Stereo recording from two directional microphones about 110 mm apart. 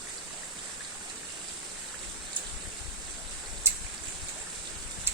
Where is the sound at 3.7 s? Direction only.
20° right (ahead or behind).